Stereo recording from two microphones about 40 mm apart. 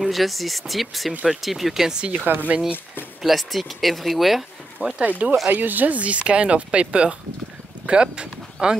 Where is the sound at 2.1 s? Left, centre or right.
Right.